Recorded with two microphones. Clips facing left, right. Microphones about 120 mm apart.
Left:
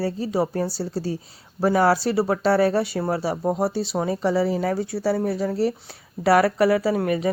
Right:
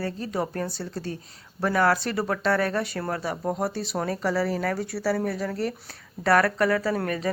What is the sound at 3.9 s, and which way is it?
Speech, 15° left (ahead or behind).